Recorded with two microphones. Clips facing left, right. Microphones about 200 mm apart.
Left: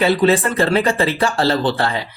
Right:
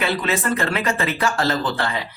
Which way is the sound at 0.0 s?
35° left (ahead or behind).